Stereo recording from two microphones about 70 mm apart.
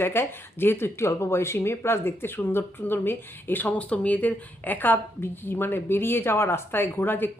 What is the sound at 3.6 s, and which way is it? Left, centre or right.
Speech, centre.